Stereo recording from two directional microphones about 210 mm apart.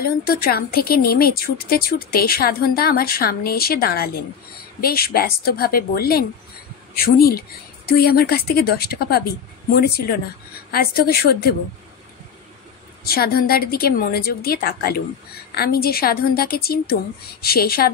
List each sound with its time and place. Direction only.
0.0 s a woman's voice: 45° left (ahead or behind)
13.0 s a woman's voice: 45° left (ahead or behind)